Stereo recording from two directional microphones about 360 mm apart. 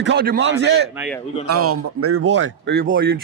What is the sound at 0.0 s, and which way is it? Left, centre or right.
Speech, right.